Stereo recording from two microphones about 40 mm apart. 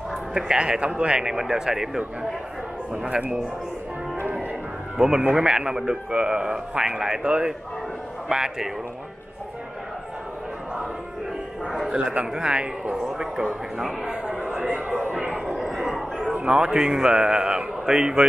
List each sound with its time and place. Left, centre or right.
0.3 s a man's voice: right
1.3 s speech: centre
3.1 s a man's voice: right
4.9 s a man's voice: centre
11.6 s a sound: centre
11.9 s a man's voice: right
14.0 s a sound: right
14.7 s a sound: right
15.4 s bow-wow: centre
16.4 s a man's voice: right